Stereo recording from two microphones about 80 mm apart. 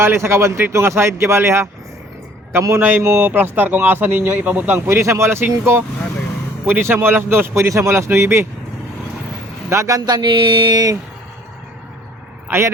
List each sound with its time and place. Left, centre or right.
0.0 s speech: right
2.7 s speech: right
4.9 s speech: right
9.6 s speech: right
10.1 s a sound: right
12.5 s speech: right